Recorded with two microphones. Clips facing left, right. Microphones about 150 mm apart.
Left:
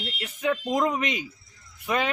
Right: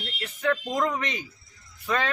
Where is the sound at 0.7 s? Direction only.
20° left (ahead or behind).